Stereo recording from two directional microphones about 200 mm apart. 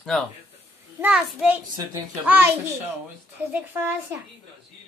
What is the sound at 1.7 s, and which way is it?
Speech, 20° right (ahead or behind).